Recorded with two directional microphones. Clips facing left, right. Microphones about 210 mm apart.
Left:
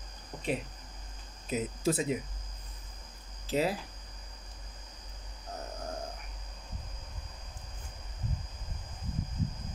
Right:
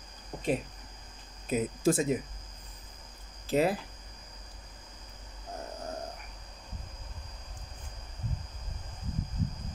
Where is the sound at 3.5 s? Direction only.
55° right (ahead or behind).